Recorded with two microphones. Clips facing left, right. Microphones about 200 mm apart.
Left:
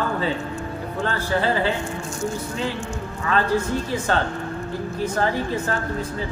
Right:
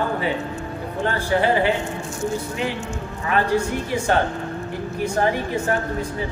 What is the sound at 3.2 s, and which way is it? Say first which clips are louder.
Speech: right 1 dB; 15° right (ahead or behind).